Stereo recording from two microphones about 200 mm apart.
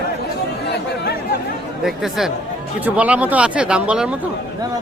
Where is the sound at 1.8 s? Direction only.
Centre (ahead or behind).